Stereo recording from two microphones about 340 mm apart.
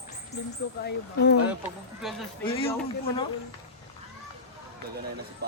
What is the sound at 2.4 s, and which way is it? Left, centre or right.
Speech, centre.